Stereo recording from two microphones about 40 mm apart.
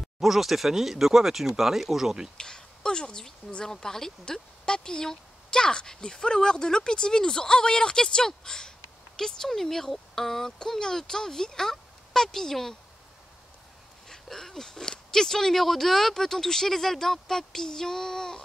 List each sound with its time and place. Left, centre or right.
0.2 s speech: centre
2.3 s speech: centre
14.0 s speech: centre